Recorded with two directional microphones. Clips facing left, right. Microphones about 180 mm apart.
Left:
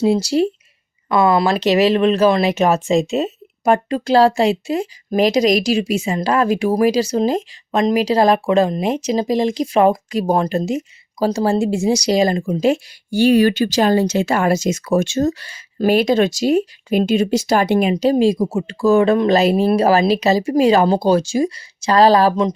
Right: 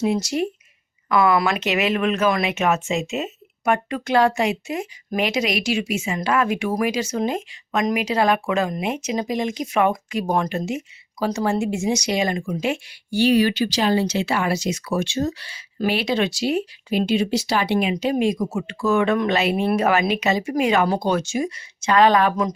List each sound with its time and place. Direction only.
0.0 s speech: 30° left (ahead or behind)
17.9 s speech: 35° left (ahead or behind)